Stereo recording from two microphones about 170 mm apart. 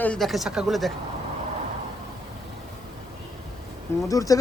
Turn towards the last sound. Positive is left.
turn(degrees=20)  # may be behind; listen again after turning